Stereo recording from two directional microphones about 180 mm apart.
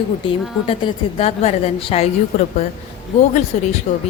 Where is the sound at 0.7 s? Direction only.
30° left (ahead or behind).